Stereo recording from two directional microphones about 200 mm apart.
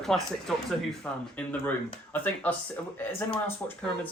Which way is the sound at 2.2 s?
10° left (ahead or behind).